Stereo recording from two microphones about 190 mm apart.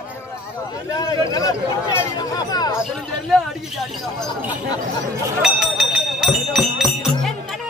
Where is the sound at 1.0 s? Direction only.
20° left (ahead or behind).